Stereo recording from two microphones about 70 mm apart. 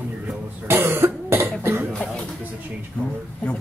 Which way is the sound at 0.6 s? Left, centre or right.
Right.